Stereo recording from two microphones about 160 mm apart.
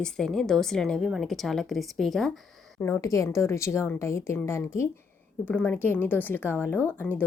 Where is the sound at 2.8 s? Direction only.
15° left (ahead or behind).